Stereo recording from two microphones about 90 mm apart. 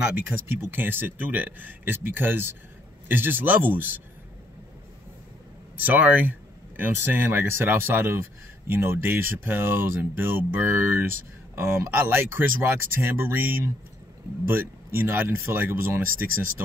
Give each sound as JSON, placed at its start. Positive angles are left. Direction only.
{"t": 0.1, "sound": "speech", "side_deg": -20}
{"t": 5.8, "sound": "speech", "side_deg": -20}
{"t": 14.5, "sound": "speech", "side_deg": -25}